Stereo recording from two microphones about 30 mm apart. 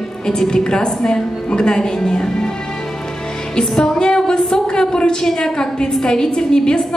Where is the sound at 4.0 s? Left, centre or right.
Left.